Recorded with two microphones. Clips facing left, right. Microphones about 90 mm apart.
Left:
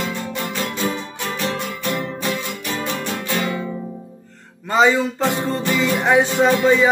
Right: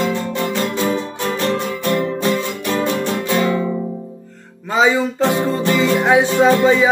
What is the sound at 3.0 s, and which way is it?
Music, 35° right (ahead or behind).